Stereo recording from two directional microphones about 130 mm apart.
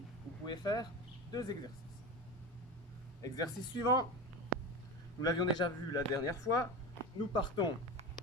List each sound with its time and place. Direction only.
0.4 s speech: 30° left (ahead or behind)
3.2 s speech: 30° left (ahead or behind)
5.2 s speech: 30° left (ahead or behind)